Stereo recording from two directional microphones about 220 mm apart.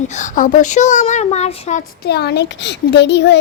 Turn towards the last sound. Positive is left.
turn(degrees=50)  # may be behind; listen again after turning